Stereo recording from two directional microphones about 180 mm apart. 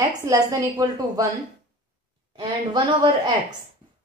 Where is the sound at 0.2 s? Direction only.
15° right (ahead or behind).